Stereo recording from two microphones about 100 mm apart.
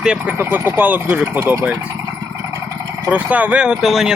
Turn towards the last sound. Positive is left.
turn(degrees=-5)  # may be behind; listen again after turning